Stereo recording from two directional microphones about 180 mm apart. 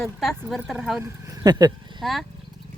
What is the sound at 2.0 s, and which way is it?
Speech, centre (ahead or behind).